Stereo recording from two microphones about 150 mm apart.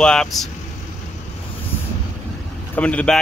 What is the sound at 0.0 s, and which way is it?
Speech, 5° left (ahead or behind).